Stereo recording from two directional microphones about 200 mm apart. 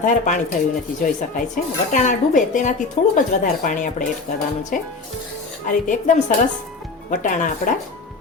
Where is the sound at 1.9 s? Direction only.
40° left (ahead or behind).